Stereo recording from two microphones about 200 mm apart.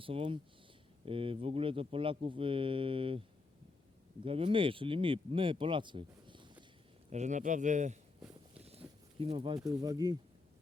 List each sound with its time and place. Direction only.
0.0 s speech: 25° right (ahead or behind)
7.1 s speech: 35° right (ahead or behind)
9.1 s speech: 30° right (ahead or behind)
9.6 s speech: 20° right (ahead or behind)